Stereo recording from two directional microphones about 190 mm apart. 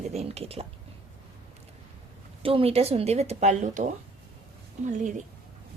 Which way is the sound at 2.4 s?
30° right (ahead or behind).